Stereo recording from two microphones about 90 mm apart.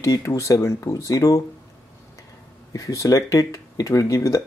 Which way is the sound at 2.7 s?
40° left (ahead or behind).